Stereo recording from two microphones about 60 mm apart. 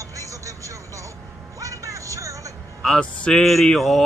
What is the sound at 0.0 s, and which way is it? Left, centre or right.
Vehicle, right.